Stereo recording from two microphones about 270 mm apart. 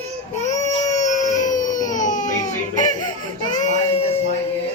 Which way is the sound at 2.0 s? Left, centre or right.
Left.